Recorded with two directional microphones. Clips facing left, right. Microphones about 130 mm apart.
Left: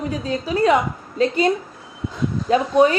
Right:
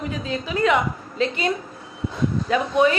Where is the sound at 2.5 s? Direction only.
40° left (ahead or behind).